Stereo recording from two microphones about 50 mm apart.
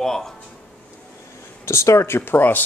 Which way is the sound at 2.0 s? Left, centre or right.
Left.